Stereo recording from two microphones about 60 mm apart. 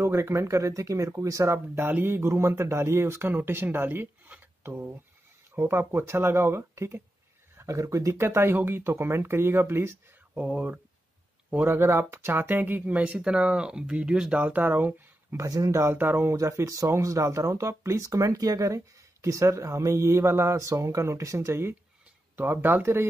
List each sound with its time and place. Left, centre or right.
0.0 s speech: right
1.8 s speech: right
4.4 s a sound: right
5.5 s speech: right
7.5 s speech: right
10.3 s speech: right
11.6 s speech: right; by 14.4 s centre
14.4 s speech: right
15.3 s speech: right
15.7 s speech: right
16.3 s speech: right
22.3 s speech: right